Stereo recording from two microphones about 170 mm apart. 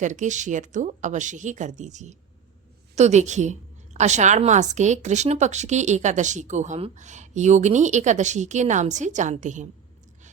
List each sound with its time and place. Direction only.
0.0 s a woman's voice: 45° right (ahead or behind)